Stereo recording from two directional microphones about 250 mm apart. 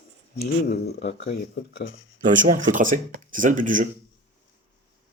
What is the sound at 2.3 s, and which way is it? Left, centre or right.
Speech, right.